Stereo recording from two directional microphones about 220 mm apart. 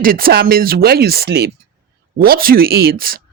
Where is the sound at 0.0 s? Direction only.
40° right (ahead or behind).